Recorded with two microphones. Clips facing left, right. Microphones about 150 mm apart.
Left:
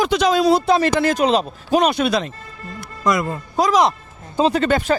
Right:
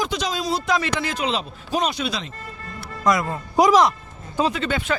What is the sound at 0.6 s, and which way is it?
Speech, 35° left (ahead or behind).